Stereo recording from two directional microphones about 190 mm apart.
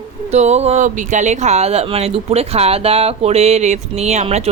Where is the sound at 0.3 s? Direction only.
35° right (ahead or behind).